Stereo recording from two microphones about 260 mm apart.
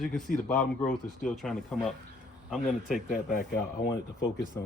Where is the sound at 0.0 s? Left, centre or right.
Centre.